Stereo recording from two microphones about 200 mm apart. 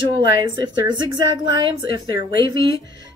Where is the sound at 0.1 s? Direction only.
20° right (ahead or behind).